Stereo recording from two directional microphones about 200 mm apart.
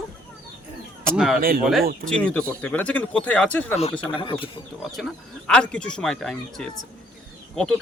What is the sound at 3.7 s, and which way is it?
Speech, 30° left (ahead or behind).